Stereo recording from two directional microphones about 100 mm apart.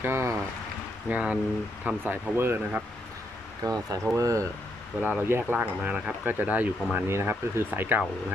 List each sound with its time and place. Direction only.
0.0 s speech: 25° right (ahead or behind)
1.1 s speech: 10° right (ahead or behind)
3.6 s speech: 40° right (ahead or behind)
4.0 s speech: 30° right (ahead or behind)
4.9 s speech: 15° right (ahead or behind)